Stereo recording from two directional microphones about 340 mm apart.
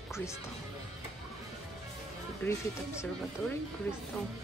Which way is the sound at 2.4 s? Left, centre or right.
Centre.